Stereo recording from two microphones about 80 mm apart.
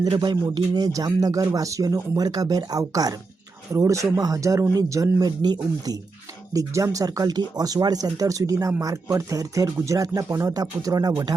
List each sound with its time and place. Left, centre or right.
0.1 s speech: right
3.7 s speech: right
6.5 s speech: right
7.3 s speech: right